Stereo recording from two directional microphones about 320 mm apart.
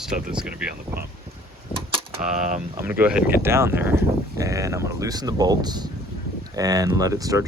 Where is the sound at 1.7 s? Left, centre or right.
Centre.